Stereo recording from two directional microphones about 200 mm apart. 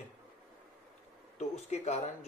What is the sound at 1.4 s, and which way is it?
Speech, 35° left (ahead or behind).